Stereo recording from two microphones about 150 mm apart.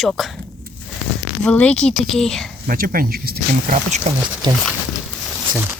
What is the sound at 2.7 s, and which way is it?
Speech, 75° right (ahead or behind).